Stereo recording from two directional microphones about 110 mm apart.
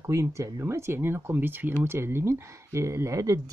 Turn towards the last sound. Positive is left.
turn(degrees=-30)  # may be behind; listen again after turning